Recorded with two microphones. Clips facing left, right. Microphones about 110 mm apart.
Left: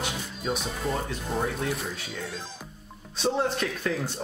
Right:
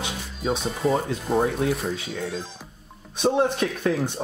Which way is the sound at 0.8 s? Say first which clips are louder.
Right 8 dB; centre (ahead or behind).